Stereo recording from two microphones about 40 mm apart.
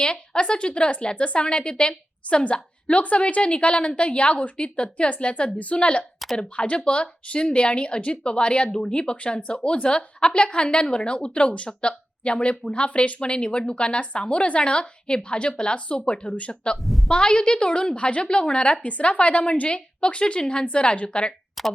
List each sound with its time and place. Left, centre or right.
0.0 s speech: left
18.8 s speech: left
21.6 s speech: centre